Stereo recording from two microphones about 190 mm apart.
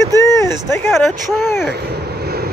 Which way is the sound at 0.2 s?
15° left (ahead or behind).